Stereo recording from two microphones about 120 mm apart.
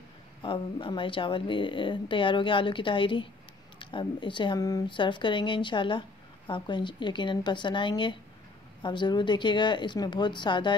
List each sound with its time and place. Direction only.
0.4 s a woman's voice: 45° left (ahead or behind)
4.8 s a woman's voice: 40° left (ahead or behind)